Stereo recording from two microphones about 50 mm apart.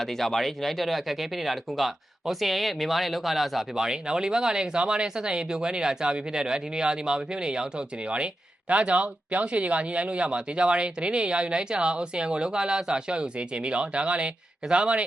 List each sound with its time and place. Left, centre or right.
0.0 s speech: centre
3.8 s speech: centre
8.7 s speech: right